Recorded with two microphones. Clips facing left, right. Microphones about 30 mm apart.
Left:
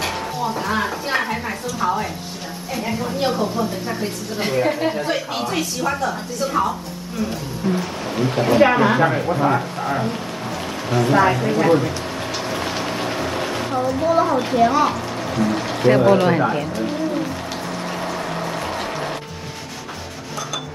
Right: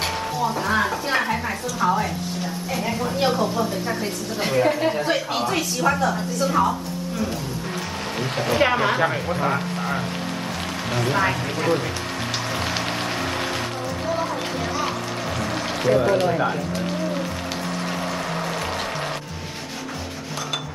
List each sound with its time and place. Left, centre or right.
0.4 s a woman's voice: centre
8.2 s speech: left
8.6 s a woman's voice: left
11.0 s speech: left
13.7 s speech: left